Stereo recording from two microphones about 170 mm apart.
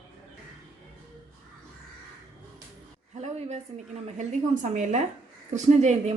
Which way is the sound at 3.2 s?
40° right (ahead or behind).